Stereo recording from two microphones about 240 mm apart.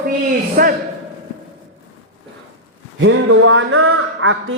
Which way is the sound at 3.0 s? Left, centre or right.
Right.